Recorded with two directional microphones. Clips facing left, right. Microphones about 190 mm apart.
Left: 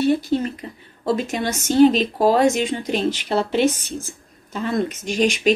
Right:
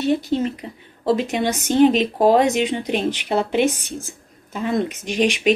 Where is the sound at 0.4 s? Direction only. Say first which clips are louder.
Right 3 dB; 15° right (ahead or behind).